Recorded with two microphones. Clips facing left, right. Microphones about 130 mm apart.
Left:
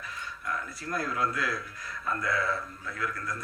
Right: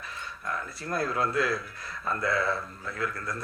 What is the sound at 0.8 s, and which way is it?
Speech, 30° right (ahead or behind).